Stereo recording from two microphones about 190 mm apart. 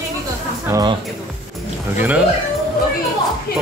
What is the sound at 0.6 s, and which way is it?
Speech, 15° right (ahead or behind).